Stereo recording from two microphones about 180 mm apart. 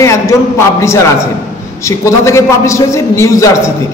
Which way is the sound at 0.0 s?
15° left (ahead or behind).